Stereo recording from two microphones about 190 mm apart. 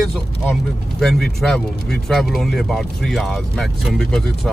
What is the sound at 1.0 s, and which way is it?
Speech, centre (ahead or behind).